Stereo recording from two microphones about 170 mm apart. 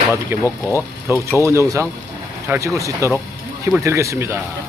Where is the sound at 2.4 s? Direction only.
15° right (ahead or behind).